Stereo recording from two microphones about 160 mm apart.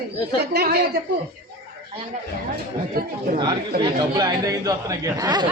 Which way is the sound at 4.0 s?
25° right (ahead or behind).